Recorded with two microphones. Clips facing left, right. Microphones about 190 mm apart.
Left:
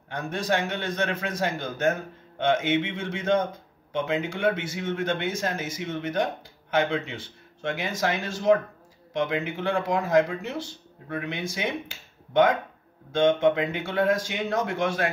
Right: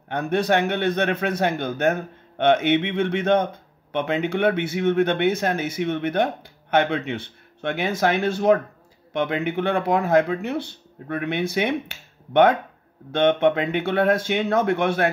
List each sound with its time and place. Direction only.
0.1 s speech: 60° right (ahead or behind)